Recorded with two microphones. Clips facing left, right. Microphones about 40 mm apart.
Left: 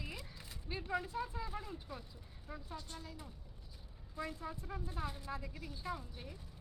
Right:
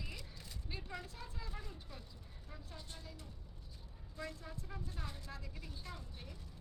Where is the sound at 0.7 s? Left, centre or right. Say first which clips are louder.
Left 8 dB; centre.